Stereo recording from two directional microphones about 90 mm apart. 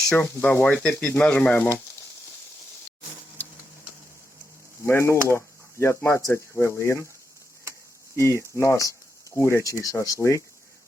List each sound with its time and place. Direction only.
0.1 s speech: 20° left (ahead or behind)
0.6 s speech: 15° left (ahead or behind)
4.9 s sizzle: 30° left (ahead or behind)
5.3 s speech: 30° left (ahead or behind)
8.1 s speech: 30° left (ahead or behind)